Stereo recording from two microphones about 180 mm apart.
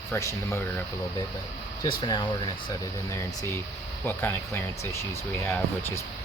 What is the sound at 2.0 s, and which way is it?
Speech, 25° left (ahead or behind).